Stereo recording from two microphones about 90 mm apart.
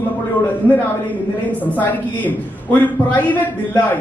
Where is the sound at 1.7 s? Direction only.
20° left (ahead or behind).